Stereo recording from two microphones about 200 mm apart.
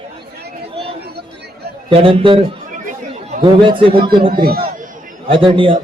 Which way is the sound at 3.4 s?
25° right (ahead or behind).